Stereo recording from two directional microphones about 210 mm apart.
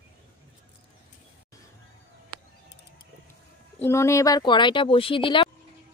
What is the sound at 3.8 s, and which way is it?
Speech, 10° left (ahead or behind).